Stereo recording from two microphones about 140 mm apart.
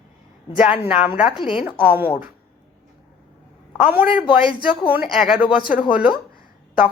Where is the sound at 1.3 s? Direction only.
35° left (ahead or behind).